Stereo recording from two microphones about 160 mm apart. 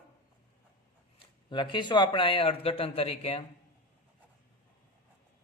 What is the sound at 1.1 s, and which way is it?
Speech, 30° left (ahead or behind).